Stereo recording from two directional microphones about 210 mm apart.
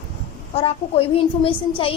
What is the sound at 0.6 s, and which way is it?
Speech, 30° left (ahead or behind).